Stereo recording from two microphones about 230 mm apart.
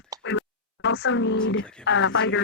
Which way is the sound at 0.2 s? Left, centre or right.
Left.